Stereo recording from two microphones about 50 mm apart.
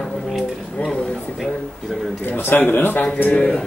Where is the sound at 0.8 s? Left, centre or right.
Left.